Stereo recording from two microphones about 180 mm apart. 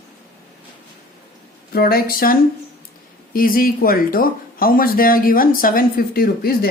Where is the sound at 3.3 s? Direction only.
50° left (ahead or behind).